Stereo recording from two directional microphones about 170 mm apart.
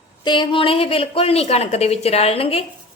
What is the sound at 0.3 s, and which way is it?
A woman's voice, 30° left (ahead or behind).